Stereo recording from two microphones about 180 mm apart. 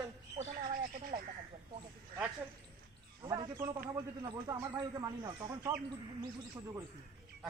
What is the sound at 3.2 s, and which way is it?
Speech, 25° right (ahead or behind).